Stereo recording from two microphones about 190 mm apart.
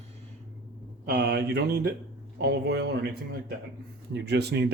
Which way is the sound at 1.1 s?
55° right (ahead or behind).